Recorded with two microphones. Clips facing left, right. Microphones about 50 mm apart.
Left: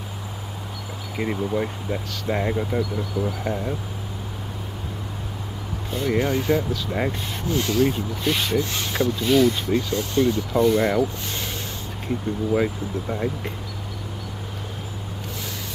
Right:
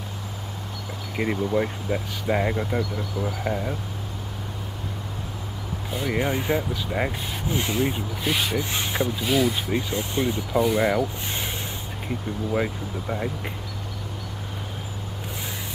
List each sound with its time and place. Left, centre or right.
1.1 s speech: centre
5.9 s speech: centre
7.5 s speech: centre
8.1 s speech: centre
10.5 s speech: centre
12.1 s speech: centre